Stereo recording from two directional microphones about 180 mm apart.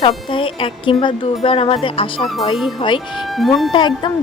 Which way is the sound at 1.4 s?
30° left (ahead or behind).